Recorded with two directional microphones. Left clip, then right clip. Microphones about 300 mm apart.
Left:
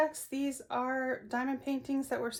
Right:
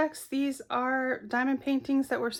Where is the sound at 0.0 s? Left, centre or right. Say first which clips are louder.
Right 2 dB; centre.